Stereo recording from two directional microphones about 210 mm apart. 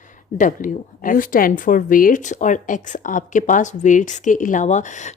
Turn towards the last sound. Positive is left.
turn(degrees=35)  # may be behind; listen again after turning